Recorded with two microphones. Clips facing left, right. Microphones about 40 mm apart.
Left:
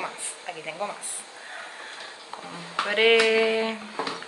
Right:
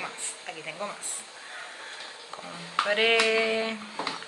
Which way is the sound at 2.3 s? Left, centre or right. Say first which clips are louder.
Left 2 dB; centre.